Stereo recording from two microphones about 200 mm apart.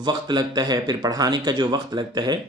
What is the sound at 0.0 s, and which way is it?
Speech, 20° right (ahead or behind).